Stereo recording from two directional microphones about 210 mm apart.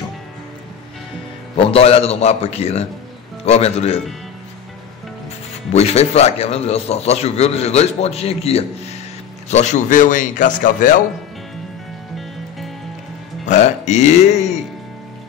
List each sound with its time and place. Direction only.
1.6 s a man's voice: 30° left (ahead or behind)
5.7 s a man's voice: 30° left (ahead or behind)
12.2 s music: centre (ahead or behind)
13.5 s speech: 35° left (ahead or behind)